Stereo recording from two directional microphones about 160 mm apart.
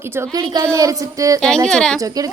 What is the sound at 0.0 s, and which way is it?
A woman's voice, 15° right (ahead or behind).